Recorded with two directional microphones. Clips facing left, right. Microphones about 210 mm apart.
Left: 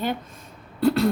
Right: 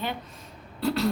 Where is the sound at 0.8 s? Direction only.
50° left (ahead or behind).